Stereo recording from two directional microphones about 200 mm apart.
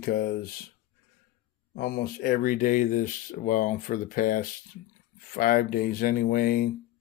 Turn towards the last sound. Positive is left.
turn(degrees=50)  # may be behind; listen again after turning